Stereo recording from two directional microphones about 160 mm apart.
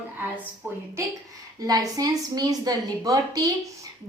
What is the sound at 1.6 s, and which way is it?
A woman's voice, 25° right (ahead or behind).